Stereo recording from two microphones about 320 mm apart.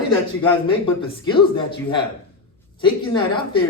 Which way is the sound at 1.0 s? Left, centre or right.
Centre.